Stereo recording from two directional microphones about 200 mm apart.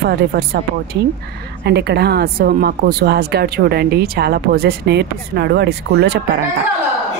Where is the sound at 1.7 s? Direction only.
55° right (ahead or behind).